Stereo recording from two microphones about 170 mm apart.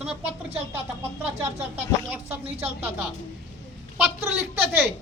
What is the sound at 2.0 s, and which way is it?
Speech, 10° right (ahead or behind).